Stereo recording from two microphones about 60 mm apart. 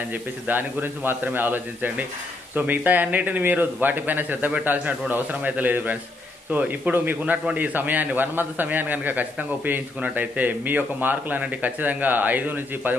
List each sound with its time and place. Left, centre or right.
0.1 s a man's voice: right